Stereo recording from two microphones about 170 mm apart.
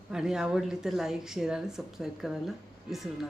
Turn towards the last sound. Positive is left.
turn(degrees=0)  # may be behind; listen again after turning